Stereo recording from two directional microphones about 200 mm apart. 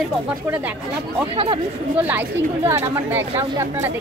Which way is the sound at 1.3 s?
25° right (ahead or behind).